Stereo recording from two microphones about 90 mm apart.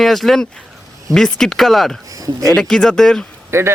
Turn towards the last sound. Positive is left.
turn(degrees=-30)  # may be behind; listen again after turning